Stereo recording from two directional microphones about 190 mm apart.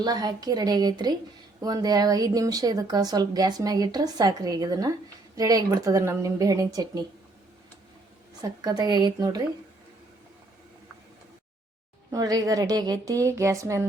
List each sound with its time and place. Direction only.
0.0 s a woman's voice: 20° right (ahead or behind)
8.4 s speech: 20° right (ahead or behind)
12.1 s speech: 20° right (ahead or behind)